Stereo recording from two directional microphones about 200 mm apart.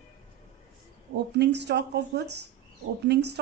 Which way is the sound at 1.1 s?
55° right (ahead or behind).